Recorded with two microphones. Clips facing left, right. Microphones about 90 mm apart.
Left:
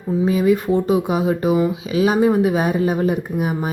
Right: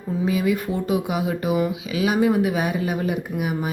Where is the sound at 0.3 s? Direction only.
35° left (ahead or behind).